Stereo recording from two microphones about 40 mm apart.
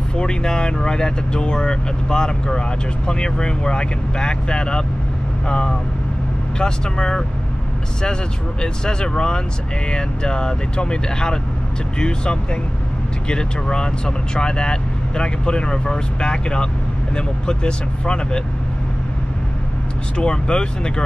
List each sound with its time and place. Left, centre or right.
0.1 s speech: centre
20.2 s speech: left